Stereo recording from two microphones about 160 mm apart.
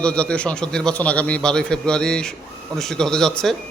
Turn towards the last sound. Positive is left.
turn(degrees=5)  # may be behind; listen again after turning